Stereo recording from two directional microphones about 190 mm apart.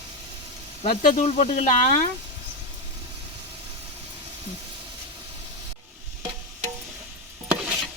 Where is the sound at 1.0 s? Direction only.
40° left (ahead or behind).